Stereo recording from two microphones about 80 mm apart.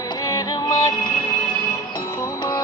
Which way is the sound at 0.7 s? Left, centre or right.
Left.